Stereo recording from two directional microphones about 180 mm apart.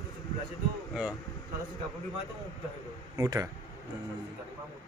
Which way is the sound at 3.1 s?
20° right (ahead or behind).